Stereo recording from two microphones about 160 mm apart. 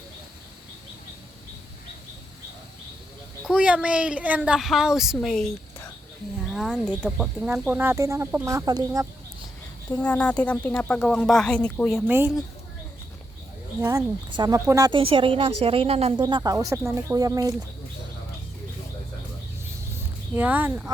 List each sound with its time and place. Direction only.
3.4 s speech: 5° right (ahead or behind)
6.5 s speech: centre (ahead or behind); by 9.0 s 20° right (ahead or behind)
10.0 s speech: 10° left (ahead or behind)
12.0 s speech: 15° right (ahead or behind)
14.3 s a woman's voice: 25° right (ahead or behind)
20.3 s speech: 10° right (ahead or behind)